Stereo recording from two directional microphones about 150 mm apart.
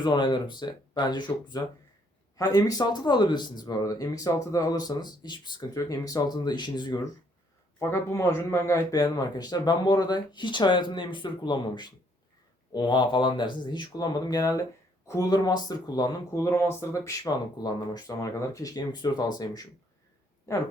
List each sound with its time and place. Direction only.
0.0 s speech: 30° left (ahead or behind)
7.8 s speech: 20° left (ahead or behind)